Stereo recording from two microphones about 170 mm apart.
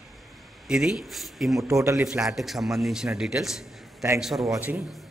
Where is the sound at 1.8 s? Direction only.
15° right (ahead or behind).